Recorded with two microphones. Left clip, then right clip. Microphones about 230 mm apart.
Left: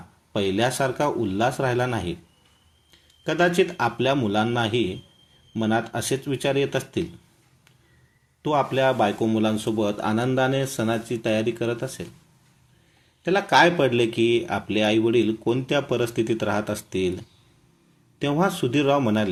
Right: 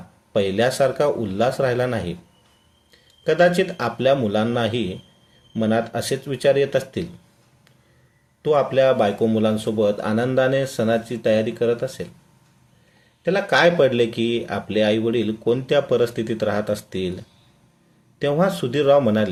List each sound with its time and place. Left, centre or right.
0.3 s speech: centre
2.9 s a sound: centre
3.6 s speech: centre
8.4 s speech: centre
13.2 s speech: left
18.2 s speech: centre